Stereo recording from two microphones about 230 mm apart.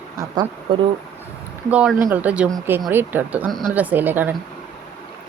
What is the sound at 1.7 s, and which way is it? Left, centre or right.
Speech, centre.